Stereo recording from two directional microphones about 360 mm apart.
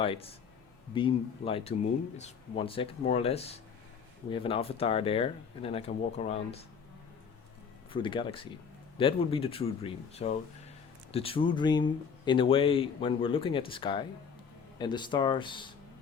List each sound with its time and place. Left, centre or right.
0.0 s speech: centre
7.9 s speech: centre